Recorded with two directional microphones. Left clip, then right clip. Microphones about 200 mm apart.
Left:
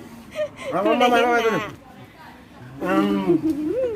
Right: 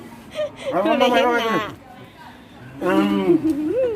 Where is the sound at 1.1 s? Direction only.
25° left (ahead or behind).